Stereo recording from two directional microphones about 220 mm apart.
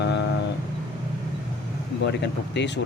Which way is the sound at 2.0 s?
50° left (ahead or behind).